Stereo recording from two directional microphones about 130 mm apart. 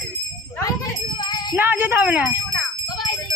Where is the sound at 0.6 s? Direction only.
30° left (ahead or behind).